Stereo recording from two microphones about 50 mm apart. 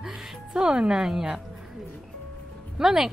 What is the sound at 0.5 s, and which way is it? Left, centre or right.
Speech, centre.